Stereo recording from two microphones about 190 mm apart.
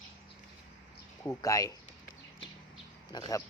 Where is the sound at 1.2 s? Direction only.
15° left (ahead or behind).